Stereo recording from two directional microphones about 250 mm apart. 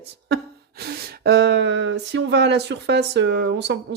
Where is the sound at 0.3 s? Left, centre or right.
Right.